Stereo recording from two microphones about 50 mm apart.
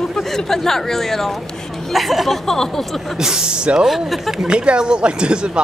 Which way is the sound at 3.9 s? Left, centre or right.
Centre.